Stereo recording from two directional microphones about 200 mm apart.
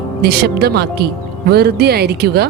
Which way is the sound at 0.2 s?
55° right (ahead or behind).